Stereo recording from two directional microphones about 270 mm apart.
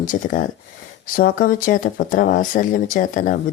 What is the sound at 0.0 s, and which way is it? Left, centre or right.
A woman's voice, left.